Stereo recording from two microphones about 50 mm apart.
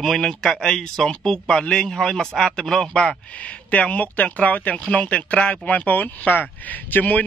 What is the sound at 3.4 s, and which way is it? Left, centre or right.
Speech, left.